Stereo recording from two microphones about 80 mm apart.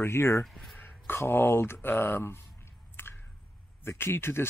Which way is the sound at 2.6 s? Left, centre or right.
Left.